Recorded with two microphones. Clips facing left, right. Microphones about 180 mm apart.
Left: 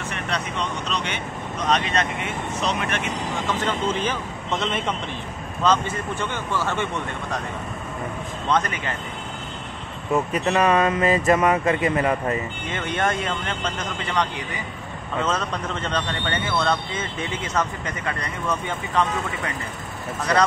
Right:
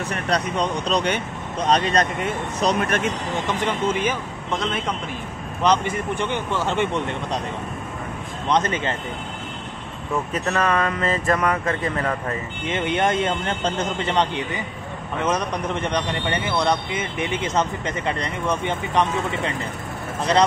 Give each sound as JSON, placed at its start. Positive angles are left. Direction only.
{"t": 0.1, "sound": "speech", "side_deg": -40}
{"t": 3.8, "sound": "a man's voice", "side_deg": -10}
{"t": 5.6, "sound": "speech", "side_deg": -15}
{"t": 8.5, "sound": "speech", "side_deg": -20}
{"t": 10.3, "sound": "speech", "side_deg": 15}
{"t": 12.6, "sound": "speech", "side_deg": -20}
{"t": 15.2, "sound": "speech", "side_deg": -15}